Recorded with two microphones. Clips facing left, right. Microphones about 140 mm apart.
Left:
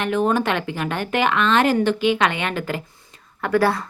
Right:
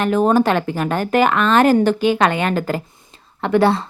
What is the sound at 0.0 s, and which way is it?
A woman's voice, 40° right (ahead or behind).